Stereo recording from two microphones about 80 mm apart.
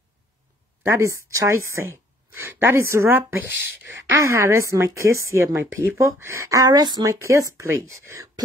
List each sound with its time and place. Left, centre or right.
0.8 s speech: right
4.2 s speech: right